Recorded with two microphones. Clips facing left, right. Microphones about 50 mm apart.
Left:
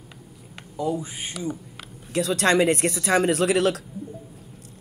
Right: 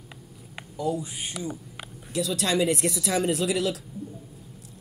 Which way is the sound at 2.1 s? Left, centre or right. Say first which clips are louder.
Left 5 dB; left.